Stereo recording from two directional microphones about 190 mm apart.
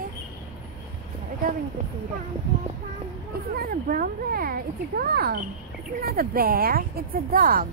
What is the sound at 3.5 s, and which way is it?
Speech, 50° right (ahead or behind).